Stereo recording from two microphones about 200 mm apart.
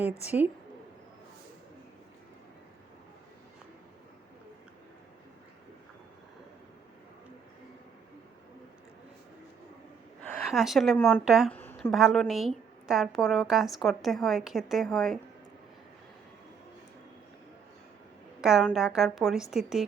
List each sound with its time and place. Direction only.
0.3 s a woman's voice: 10° right (ahead or behind)
10.4 s a woman's voice: centre (ahead or behind)
18.6 s a woman's voice: centre (ahead or behind)